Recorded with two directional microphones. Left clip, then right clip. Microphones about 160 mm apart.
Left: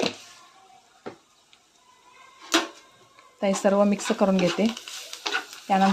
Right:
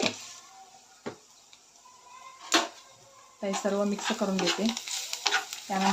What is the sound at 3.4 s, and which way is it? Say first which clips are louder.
Speech: left 8 dB; 70° left (ahead or behind).